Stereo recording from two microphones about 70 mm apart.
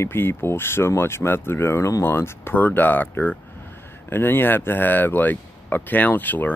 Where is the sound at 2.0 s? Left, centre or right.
Left.